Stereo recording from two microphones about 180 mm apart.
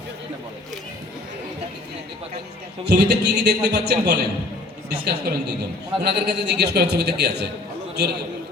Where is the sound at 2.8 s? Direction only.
65° right (ahead or behind).